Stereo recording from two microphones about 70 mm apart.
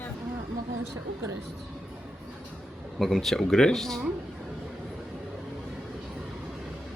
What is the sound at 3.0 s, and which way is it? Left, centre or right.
Speech, centre.